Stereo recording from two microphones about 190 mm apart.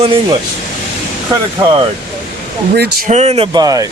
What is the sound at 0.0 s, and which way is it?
Speech, 30° right (ahead or behind).